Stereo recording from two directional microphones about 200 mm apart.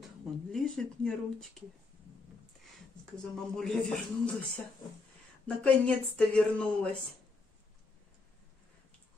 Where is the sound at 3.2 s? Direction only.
5° left (ahead or behind).